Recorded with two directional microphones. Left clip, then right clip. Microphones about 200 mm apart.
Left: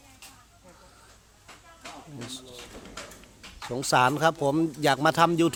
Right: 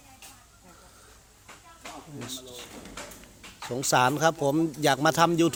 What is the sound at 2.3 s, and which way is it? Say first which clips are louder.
Speech: right 2 dB; 5° left (ahead or behind).